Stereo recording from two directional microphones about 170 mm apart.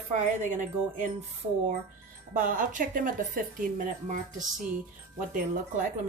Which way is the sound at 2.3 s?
50° right (ahead or behind).